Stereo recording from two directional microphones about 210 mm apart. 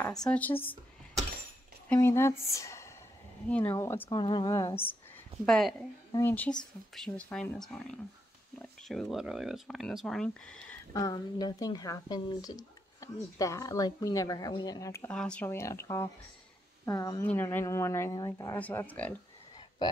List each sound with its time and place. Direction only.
0.3 s a sound: 10° left (ahead or behind)
1.9 s speech: 10° left (ahead or behind)
5.4 s speech: centre (ahead or behind)
10.9 s speech: 15° left (ahead or behind)
19.8 s frog: 20° left (ahead or behind)